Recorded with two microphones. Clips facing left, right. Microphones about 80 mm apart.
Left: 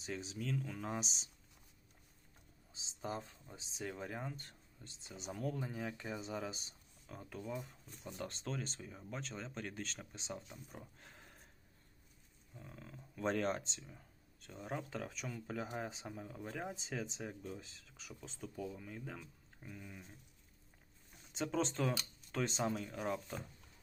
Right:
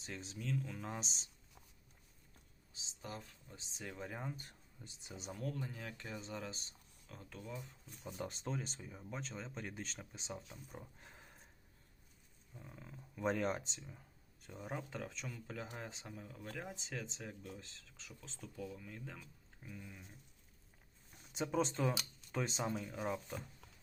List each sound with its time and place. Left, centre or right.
0.0 s speech: centre
2.7 s speech: left
3.8 s speech: centre
4.3 s speech: centre
5.1 s speech: centre
5.5 s speech: centre
10.8 s a sound: centre
12.5 s speech: centre
18.9 s speech: centre
21.3 s speech: centre